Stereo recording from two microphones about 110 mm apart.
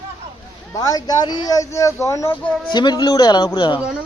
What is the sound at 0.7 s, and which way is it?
Speech, 35° left (ahead or behind).